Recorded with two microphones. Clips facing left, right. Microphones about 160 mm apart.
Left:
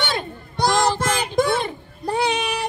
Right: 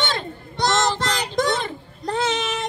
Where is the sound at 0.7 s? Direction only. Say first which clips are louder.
Left 2 dB; 20° left (ahead or behind).